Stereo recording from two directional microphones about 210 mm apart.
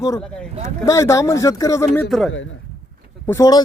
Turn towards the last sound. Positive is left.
turn(degrees=15)  # may be behind; listen again after turning